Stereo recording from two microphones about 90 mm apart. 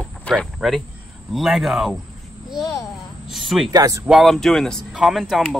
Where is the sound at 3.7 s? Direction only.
40° right (ahead or behind).